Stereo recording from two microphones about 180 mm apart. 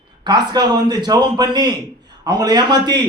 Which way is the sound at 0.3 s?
25° right (ahead or behind).